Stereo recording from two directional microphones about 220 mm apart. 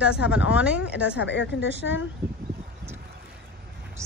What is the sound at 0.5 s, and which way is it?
Speech, 5° right (ahead or behind).